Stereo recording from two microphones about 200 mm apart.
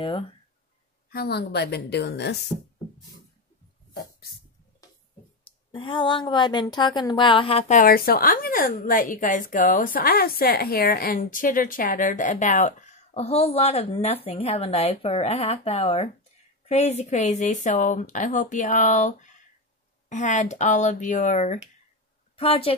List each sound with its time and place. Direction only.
1.1 s a woman's voice: 55° left (ahead or behind)
5.7 s a woman's voice: 25° left (ahead or behind)